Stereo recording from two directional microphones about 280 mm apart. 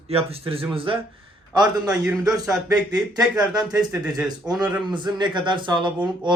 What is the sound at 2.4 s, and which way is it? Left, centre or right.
A man's voice, centre.